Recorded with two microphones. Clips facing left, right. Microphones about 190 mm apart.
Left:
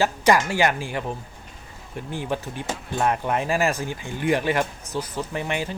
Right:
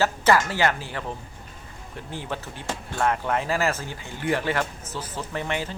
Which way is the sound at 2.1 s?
15° left (ahead or behind).